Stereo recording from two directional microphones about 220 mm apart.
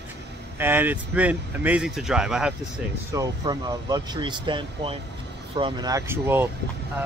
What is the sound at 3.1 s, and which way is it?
Speech, 15° right (ahead or behind).